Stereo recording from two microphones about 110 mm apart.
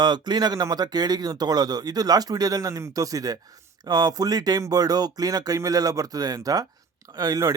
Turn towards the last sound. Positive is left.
turn(degrees=-35)  # may be behind; listen again after turning